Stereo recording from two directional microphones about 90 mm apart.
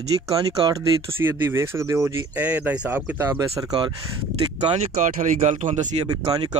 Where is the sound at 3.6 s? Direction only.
45° right (ahead or behind).